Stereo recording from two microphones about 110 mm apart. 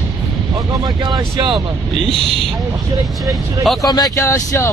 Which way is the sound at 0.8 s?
35° right (ahead or behind).